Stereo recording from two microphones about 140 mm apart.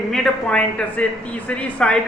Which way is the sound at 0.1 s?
5° left (ahead or behind).